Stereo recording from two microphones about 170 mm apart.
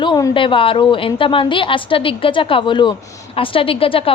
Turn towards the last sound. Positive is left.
turn(degrees=30)  # may be behind; listen again after turning